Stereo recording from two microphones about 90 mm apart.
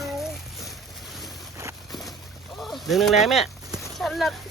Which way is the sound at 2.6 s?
Centre (ahead or behind).